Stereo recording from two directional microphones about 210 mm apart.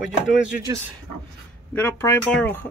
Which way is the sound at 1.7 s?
10° left (ahead or behind).